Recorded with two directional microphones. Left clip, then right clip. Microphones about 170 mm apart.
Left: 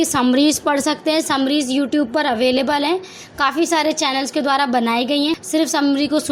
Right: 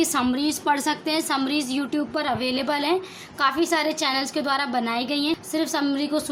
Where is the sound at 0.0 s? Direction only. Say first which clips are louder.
Left 7 dB; 25° left (ahead or behind).